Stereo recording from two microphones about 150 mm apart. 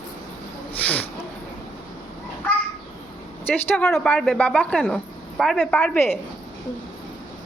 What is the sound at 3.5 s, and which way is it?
A woman's voice, 15° left (ahead or behind).